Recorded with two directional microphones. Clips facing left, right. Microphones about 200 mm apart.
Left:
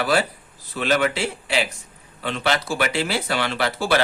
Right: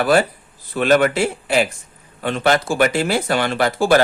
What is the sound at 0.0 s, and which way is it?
Speech, 50° right (ahead or behind).